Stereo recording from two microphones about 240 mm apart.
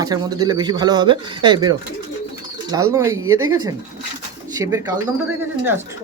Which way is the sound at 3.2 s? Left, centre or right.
Right.